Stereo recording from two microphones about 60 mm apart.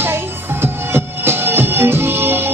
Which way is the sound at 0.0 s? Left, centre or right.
Right.